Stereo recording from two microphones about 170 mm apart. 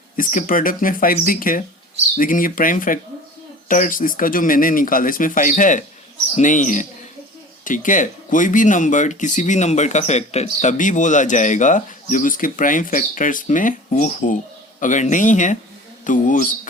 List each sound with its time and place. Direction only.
0.2 s speech: 50° left (ahead or behind)